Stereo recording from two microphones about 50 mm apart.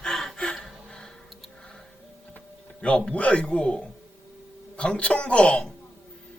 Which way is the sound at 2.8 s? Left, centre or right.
Centre.